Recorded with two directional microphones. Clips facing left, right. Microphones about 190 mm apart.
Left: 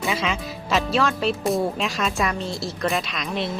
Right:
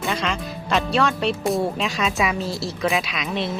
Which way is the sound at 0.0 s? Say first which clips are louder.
Even; 5° left (ahead or behind).